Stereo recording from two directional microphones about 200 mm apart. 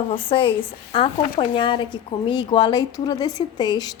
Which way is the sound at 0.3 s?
25° left (ahead or behind).